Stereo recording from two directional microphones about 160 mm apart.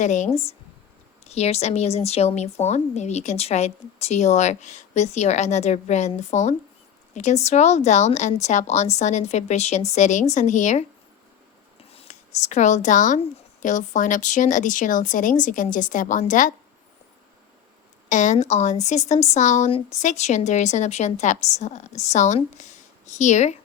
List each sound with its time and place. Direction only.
0.0 s speech: 45° left (ahead or behind)
11.8 s speech: 40° left (ahead or behind)
18.1 s speech: 50° left (ahead or behind)